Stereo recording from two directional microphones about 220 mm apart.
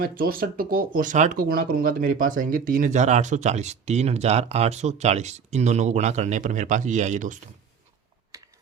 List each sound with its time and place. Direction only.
0.0 s speech: 40° right (ahead or behind)